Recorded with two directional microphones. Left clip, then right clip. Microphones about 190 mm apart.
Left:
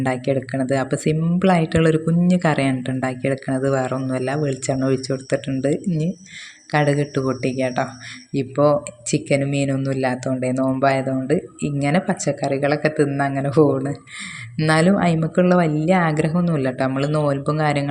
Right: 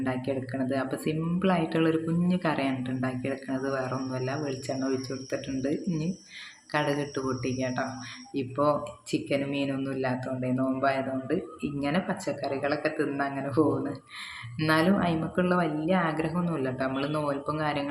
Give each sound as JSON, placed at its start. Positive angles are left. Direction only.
{"t": 0.0, "sound": "speech", "side_deg": 40}